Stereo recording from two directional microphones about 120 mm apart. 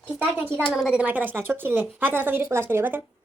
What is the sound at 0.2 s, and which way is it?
Speech, 15° right (ahead or behind).